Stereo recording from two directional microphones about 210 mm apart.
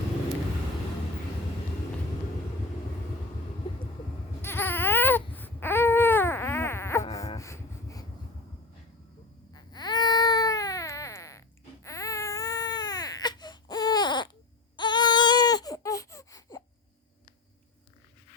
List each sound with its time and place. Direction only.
4.4 s baby cry: 10° left (ahead or behind)
7.3 s a sound: 15° left (ahead or behind)
9.5 s baby cry: 20° left (ahead or behind)